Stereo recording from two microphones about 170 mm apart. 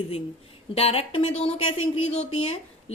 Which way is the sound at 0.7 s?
35° left (ahead or behind).